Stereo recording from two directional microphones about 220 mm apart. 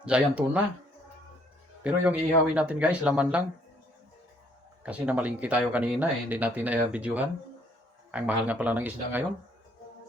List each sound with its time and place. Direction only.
0.0 s speech: 5° right (ahead or behind)
1.8 s speech: 5° right (ahead or behind)
4.8 s speech: 5° right (ahead or behind)